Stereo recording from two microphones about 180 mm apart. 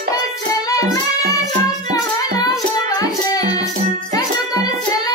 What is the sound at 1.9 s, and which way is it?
Music, 20° left (ahead or behind).